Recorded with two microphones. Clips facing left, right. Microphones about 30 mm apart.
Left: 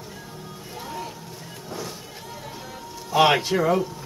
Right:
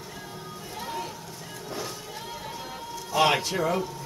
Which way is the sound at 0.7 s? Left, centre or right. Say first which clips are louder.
Even; centre.